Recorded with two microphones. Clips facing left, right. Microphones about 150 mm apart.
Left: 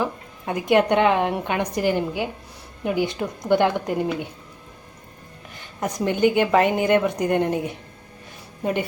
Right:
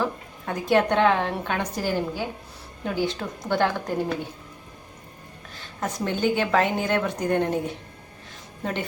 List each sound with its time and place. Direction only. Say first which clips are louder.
0.0 s a woman's voice: left 1 dB; 15° left (ahead or behind)
5.8 s a woman's voice: left 5 dB; 15° left (ahead or behind)